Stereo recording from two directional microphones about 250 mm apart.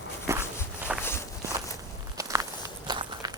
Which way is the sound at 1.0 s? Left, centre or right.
Centre.